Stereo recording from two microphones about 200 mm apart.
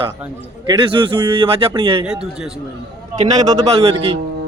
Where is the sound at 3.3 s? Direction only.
20° right (ahead or behind).